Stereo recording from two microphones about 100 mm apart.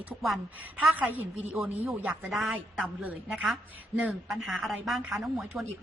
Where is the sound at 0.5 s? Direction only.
15° right (ahead or behind).